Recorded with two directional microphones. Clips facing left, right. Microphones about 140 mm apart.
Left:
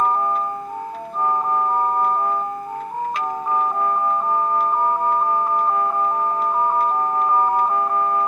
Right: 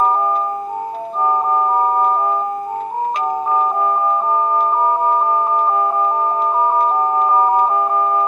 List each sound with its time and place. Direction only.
1.2 s organ: 25° right (ahead or behind)
3.5 s organ: 25° right (ahead or behind)